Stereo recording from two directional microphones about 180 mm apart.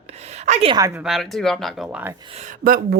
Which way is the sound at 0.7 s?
15° right (ahead or behind).